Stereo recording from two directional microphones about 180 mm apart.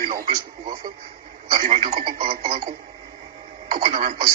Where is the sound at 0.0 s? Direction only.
50° right (ahead or behind).